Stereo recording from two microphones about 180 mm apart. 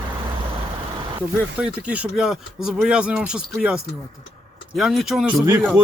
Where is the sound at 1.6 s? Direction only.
5° right (ahead or behind).